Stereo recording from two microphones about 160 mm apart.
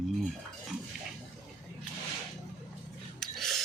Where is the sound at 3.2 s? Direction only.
Centre (ahead or behind).